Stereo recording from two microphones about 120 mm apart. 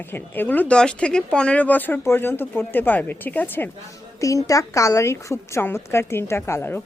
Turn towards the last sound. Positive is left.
turn(degrees=20)  # may be behind; listen again after turning